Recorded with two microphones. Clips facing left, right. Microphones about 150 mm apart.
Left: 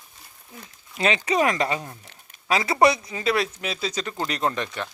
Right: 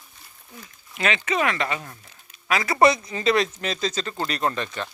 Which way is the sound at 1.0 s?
30° left (ahead or behind).